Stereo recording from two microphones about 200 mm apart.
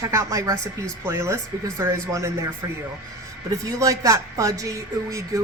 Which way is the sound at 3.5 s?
15° right (ahead or behind).